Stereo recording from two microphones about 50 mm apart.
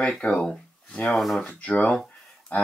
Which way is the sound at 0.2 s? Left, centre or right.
Left.